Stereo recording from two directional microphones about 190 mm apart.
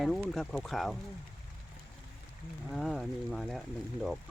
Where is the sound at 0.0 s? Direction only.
Centre (ahead or behind).